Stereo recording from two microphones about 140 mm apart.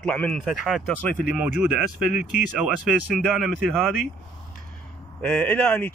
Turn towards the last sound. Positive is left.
turn(degrees=10)  # may be behind; listen again after turning